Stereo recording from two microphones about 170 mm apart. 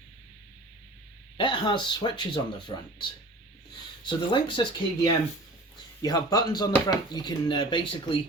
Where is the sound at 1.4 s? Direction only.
30° left (ahead or behind).